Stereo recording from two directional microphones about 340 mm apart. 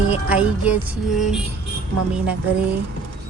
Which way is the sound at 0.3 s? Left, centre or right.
Centre.